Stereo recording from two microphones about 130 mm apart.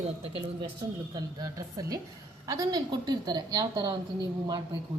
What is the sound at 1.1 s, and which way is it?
A woman's voice, 30° right (ahead or behind).